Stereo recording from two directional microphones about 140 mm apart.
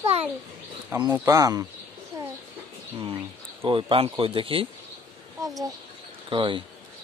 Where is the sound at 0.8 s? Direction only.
20° right (ahead or behind).